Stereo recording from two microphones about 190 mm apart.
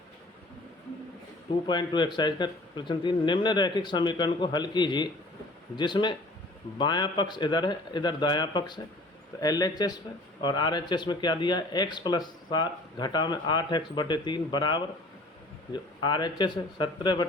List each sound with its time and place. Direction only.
1.6 s speech: 25° left (ahead or behind)